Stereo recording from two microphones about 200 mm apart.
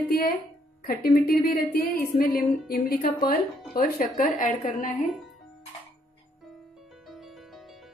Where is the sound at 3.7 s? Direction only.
45° left (ahead or behind).